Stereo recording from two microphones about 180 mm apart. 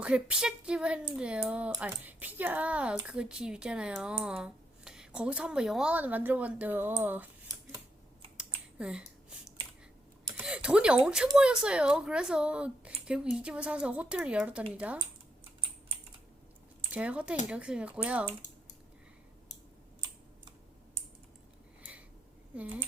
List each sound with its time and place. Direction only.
0.0 s a child's voice: 5° right (ahead or behind)
8.4 s a sound: 5° right (ahead or behind)
11.3 s a child's voice: 5° right (ahead or behind)
16.9 s speech: 5° right (ahead or behind)
22.5 s speech: 10° right (ahead or behind)